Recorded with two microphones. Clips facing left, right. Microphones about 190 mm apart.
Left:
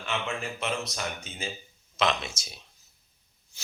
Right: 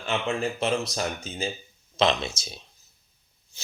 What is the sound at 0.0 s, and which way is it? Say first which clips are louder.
Speech: right 6 dB; 35° right (ahead or behind).